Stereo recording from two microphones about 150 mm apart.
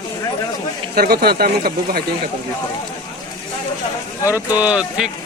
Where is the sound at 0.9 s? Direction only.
90° right.